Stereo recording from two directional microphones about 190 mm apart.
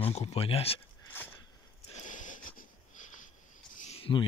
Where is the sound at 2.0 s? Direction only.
40° left (ahead or behind).